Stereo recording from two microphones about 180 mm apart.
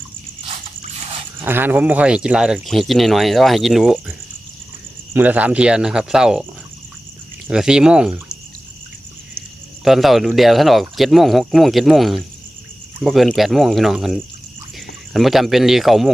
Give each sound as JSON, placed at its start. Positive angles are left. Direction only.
{"t": 1.4, "sound": "speech", "side_deg": -10}
{"t": 5.1, "sound": "speech", "side_deg": -10}
{"t": 7.4, "sound": "speech", "side_deg": -5}
{"t": 9.8, "sound": "speech", "side_deg": 0}